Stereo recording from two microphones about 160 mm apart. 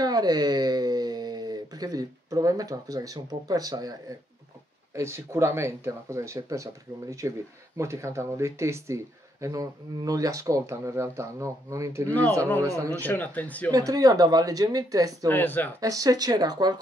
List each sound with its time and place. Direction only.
0.0 s speech: 25° right (ahead or behind)
4.9 s speech: 15° right (ahead or behind)
12.1 s speech: 10° left (ahead or behind)
12.6 s speech: 20° right (ahead or behind)
13.0 s speech: 10° left (ahead or behind)
13.7 s speech: 20° right (ahead or behind)
15.2 s speech: 10° left (ahead or behind)
15.8 s speech: 20° right (ahead or behind)